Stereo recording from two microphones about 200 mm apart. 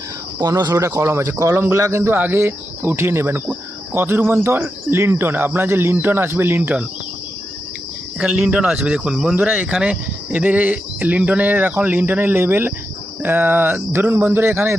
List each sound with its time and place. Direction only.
0.3 s speech: 20° right (ahead or behind)
8.2 s speech: 5° right (ahead or behind)